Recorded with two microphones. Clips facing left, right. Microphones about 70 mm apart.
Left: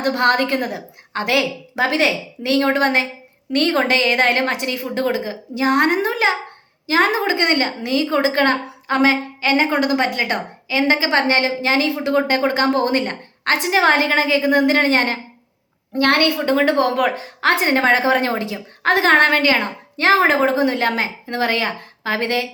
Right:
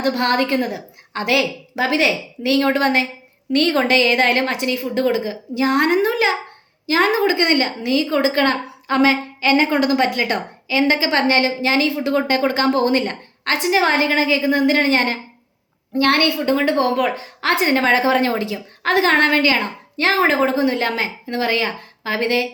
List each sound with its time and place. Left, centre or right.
0.0 s a woman's voice: left